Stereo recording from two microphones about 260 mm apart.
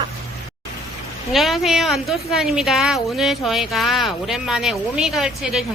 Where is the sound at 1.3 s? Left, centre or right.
Centre.